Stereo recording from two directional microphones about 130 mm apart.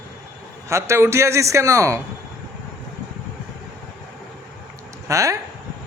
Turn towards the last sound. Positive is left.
turn(degrees=-25)  # may be behind; listen again after turning